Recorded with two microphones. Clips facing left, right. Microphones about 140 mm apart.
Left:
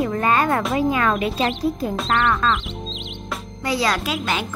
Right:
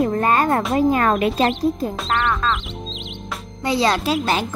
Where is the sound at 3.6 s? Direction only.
25° right (ahead or behind).